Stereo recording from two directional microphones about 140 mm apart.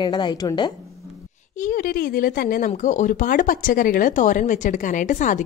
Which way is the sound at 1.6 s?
80° left.